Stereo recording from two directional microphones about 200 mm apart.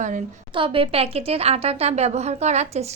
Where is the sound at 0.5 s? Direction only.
25° right (ahead or behind).